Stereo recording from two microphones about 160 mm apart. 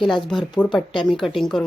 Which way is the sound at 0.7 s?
30° left (ahead or behind).